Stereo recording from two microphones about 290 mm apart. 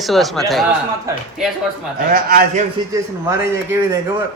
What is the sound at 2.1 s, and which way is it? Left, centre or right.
Speech, right.